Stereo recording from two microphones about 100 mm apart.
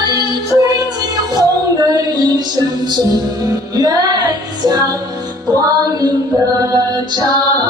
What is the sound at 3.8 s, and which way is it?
Music, 40° right (ahead or behind).